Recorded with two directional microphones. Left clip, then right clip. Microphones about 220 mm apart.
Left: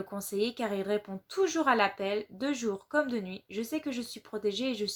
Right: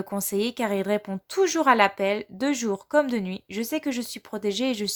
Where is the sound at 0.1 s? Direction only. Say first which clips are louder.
Right 5 dB; 45° right (ahead or behind).